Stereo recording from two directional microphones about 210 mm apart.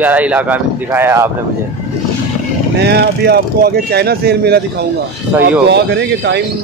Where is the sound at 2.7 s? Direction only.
50° right (ahead or behind).